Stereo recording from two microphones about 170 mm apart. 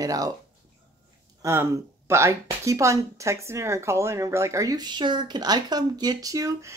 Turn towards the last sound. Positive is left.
turn(degrees=-20)  # may be behind; listen again after turning